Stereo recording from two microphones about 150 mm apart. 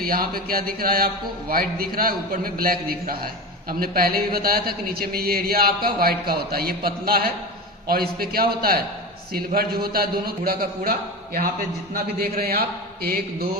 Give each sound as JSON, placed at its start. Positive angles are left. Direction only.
{"t": 0.0, "sound": "a sound", "side_deg": -75}
{"t": 3.7, "sound": "a man's voice", "side_deg": -80}
{"t": 11.9, "sound": "speech", "side_deg": -90}